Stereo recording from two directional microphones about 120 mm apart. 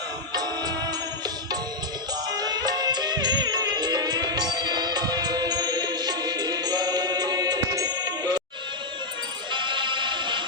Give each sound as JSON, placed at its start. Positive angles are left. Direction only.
{"t": 2.3, "sound": "music", "side_deg": -35}
{"t": 9.5, "sound": "music", "side_deg": -40}